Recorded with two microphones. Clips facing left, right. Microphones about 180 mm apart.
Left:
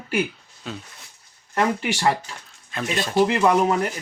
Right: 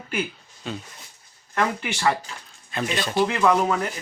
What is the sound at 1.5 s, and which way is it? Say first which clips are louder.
Speech: left 3 dB; 35° left (ahead or behind).